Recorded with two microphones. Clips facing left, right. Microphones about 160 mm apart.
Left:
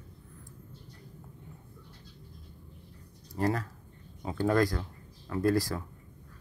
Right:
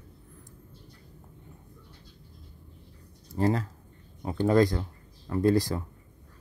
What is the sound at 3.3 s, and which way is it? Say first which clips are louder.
Speech: right 4 dB; 30° right (ahead or behind).